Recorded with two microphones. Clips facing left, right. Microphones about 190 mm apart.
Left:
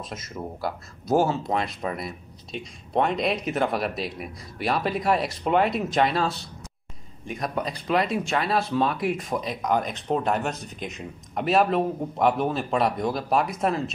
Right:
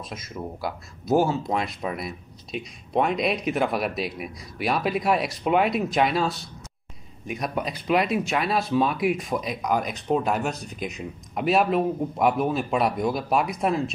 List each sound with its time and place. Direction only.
0.1 s speech: 10° right (ahead or behind)